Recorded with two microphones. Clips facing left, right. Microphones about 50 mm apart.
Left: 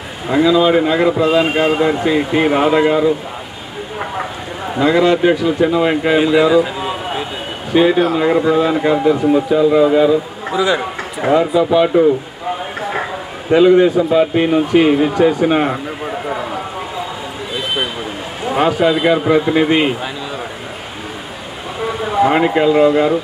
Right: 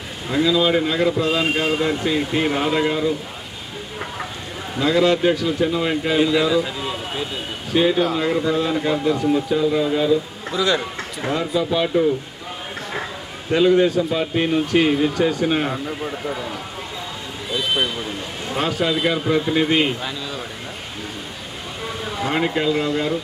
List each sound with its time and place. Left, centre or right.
0.5 s a man's voice: centre
4.7 s a man's voice: centre
12.8 s a sound: left
13.5 s a man's voice: centre
18.4 s a man's voice: centre
21.8 s a sound: centre
22.3 s a man's voice: left